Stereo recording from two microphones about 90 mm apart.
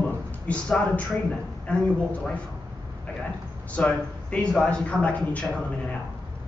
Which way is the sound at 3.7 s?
15° left (ahead or behind).